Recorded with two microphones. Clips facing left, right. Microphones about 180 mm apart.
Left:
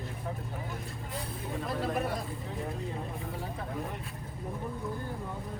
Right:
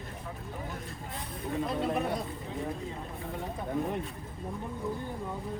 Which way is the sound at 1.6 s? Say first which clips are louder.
Even; centre (ahead or behind).